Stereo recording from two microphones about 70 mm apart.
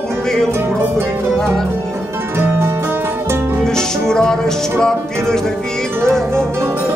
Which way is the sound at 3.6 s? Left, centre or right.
Centre.